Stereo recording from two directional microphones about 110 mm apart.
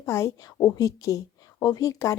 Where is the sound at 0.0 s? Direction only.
25° left (ahead or behind).